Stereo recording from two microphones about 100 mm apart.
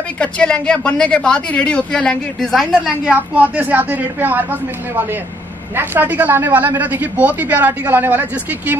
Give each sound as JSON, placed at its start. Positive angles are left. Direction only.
{"t": 0.2, "sound": "a woman's voice", "side_deg": 10}
{"t": 3.1, "sound": "a woman's voice", "side_deg": -15}